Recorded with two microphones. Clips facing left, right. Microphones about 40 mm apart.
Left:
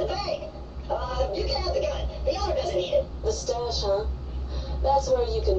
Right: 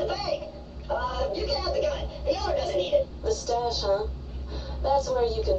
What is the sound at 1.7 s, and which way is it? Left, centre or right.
A woman's voice, right.